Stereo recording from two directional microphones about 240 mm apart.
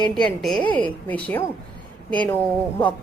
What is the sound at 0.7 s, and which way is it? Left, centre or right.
Speech, centre.